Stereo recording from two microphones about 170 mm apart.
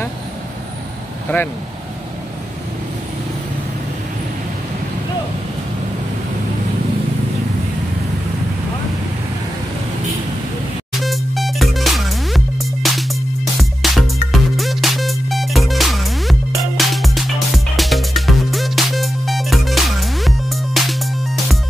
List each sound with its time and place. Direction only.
1.3 s speech: 10° left (ahead or behind)
11.0 s music: centre (ahead or behind)